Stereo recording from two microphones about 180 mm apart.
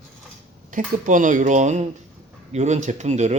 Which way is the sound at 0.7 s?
45° right (ahead or behind).